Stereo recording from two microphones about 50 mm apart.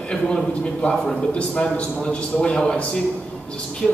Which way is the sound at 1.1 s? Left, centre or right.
Centre.